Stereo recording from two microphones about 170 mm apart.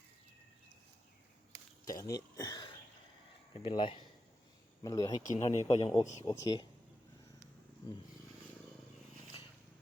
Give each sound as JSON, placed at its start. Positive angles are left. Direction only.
{"t": 1.5, "sound": "a sound", "side_deg": 20}
{"t": 3.5, "sound": "speech", "side_deg": 30}
{"t": 4.8, "sound": "speech", "side_deg": 20}
{"t": 5.3, "sound": "speech", "side_deg": 40}
{"t": 6.2, "sound": "speech", "side_deg": 20}